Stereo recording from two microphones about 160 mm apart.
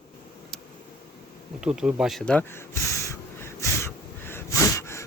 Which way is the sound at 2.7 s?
20° left (ahead or behind).